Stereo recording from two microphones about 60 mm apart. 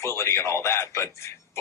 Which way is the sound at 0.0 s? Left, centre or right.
Left.